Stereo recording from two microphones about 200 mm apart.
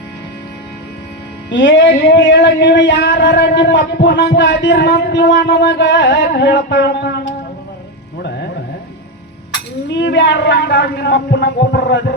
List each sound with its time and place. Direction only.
1.5 s music: 65° left (ahead or behind)
9.9 s music: 60° left (ahead or behind)